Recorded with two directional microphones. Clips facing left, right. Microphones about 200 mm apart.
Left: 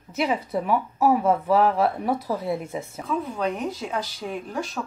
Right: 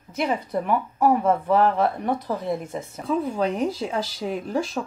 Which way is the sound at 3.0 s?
30° right (ahead or behind).